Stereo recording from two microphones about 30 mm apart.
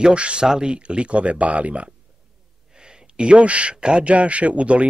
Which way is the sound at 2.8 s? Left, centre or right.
Right.